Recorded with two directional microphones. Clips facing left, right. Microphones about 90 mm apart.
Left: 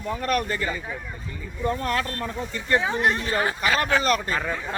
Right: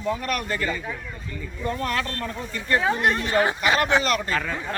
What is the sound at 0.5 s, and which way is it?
Speech, 20° left (ahead or behind).